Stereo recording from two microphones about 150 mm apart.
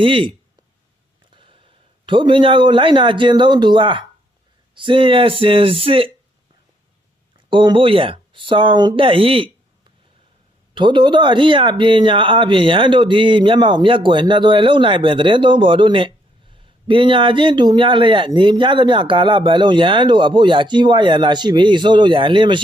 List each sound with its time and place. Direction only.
0.0 s a man's voice: 35° right (ahead or behind)
7.3 s speech: 30° right (ahead or behind)
10.8 s speech: 30° right (ahead or behind)